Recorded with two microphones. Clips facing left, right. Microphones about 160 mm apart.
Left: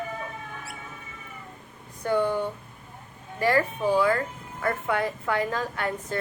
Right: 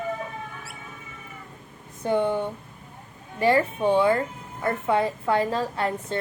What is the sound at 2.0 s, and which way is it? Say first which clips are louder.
Speech: right 1 dB; 20° right (ahead or behind).